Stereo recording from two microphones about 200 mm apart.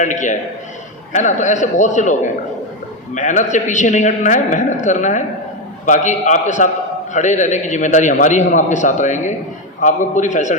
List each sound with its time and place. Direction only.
0.0 s a man's voice: 40° left (ahead or behind)
3.2 s a man's voice: 40° left (ahead or behind)